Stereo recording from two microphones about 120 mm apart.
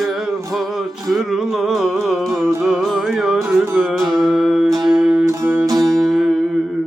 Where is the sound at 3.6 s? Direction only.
20° right (ahead or behind).